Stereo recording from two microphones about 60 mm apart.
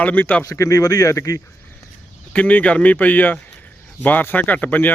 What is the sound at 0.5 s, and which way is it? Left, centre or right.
Speech, left.